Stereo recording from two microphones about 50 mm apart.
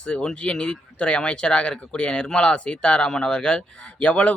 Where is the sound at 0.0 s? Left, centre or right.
Left.